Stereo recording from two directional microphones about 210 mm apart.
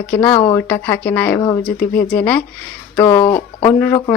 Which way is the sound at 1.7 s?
45° left (ahead or behind).